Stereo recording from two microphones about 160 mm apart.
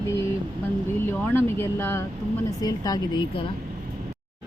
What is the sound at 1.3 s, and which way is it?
A woman's voice, 15° left (ahead or behind).